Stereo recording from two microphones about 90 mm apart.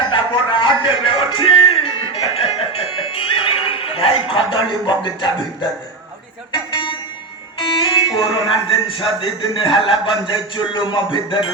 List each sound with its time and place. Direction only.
0.1 s music: 65° left (ahead or behind)
6.7 s music: 70° left (ahead or behind)
7.6 s speech: 70° left (ahead or behind)